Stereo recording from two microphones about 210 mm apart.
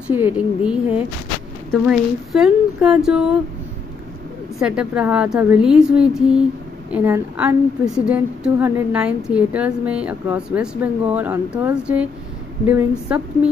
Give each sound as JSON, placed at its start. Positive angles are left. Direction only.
{"t": 0.1, "sound": "a woman's voice", "side_deg": -10}
{"t": 4.6, "sound": "a woman's voice", "side_deg": -5}